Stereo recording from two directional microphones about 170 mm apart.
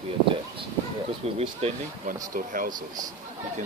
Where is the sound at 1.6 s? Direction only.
40° right (ahead or behind).